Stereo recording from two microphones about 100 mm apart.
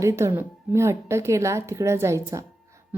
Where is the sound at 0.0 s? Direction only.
25° right (ahead or behind).